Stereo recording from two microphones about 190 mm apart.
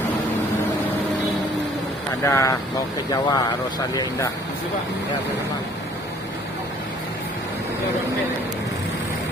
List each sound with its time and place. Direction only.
2.2 s speech: 15° left (ahead or behind)